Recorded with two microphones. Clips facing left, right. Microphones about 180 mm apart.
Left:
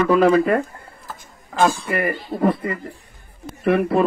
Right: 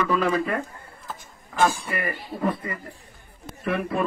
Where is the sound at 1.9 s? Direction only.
65° left (ahead or behind).